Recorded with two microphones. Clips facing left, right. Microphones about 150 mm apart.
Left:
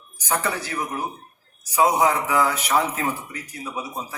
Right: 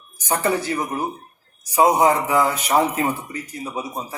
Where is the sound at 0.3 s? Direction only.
30° right (ahead or behind).